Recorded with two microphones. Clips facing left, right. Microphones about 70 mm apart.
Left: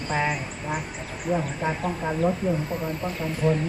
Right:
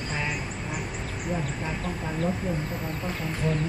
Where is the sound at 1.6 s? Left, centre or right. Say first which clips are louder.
Left 5 dB; left.